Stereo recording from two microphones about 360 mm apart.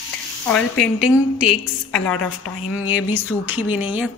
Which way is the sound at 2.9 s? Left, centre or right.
Left.